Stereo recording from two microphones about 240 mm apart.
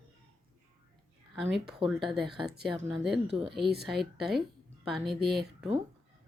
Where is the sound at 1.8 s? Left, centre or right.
Right.